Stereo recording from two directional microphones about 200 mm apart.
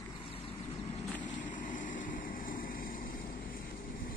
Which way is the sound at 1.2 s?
40° left (ahead or behind).